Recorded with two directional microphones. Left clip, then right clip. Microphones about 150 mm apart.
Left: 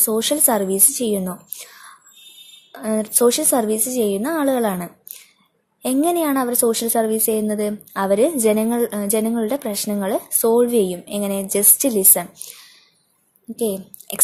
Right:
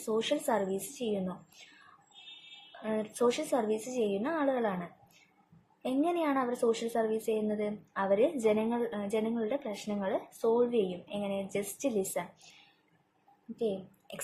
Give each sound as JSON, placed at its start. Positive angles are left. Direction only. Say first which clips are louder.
{"t": 0.0, "sound": "a woman's voice", "louder": "left 11 dB", "side_deg": 55}
{"t": 2.8, "sound": "speech", "louder": "left 12 dB", "side_deg": 55}
{"t": 5.8, "sound": "a woman's voice", "louder": "left 12 dB", "side_deg": 60}